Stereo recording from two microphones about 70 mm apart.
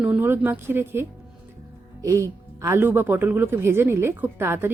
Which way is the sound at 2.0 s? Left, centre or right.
Right.